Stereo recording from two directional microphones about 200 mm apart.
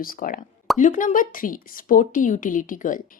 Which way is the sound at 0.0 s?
45° left (ahead or behind).